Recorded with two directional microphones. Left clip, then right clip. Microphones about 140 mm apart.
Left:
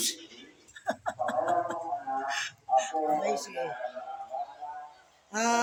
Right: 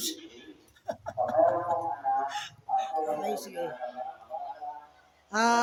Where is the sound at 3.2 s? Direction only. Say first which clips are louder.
Left 2 dB; 25° right (ahead or behind).